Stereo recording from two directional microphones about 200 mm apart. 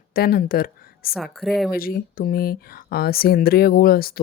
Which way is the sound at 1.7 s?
50° left (ahead or behind).